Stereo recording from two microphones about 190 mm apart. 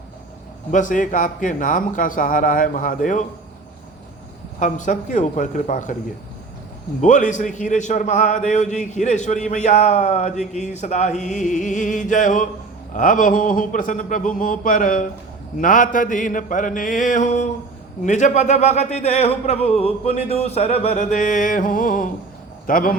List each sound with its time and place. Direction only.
0.7 s a man's voice: 40° left (ahead or behind)
4.6 s a man's voice: 40° left (ahead or behind)
7.0 s a man's voice: 40° left (ahead or behind)